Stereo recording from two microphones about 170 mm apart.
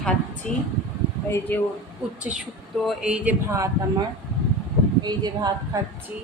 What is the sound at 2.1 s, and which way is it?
A man's voice, 5° right (ahead or behind).